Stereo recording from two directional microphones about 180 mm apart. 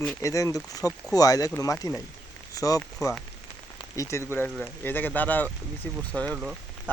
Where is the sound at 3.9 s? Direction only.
15° left (ahead or behind).